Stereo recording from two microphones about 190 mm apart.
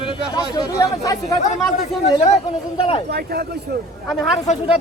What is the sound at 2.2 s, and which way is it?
Speech, 30° left (ahead or behind).